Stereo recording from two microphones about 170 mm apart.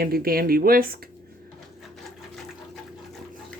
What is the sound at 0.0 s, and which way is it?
Speech, 60° right (ahead or behind).